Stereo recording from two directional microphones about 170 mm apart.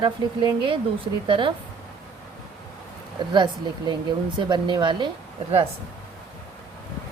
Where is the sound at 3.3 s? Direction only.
25° right (ahead or behind).